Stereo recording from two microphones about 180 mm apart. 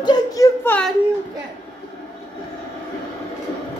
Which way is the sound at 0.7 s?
5° left (ahead or behind).